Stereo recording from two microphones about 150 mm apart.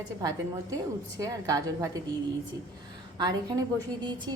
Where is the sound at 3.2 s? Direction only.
25° right (ahead or behind).